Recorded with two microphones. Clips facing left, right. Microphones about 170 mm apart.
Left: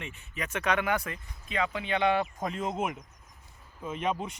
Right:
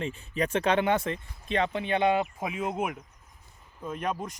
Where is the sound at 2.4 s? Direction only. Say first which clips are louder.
Right 1 dB; 5° right (ahead or behind).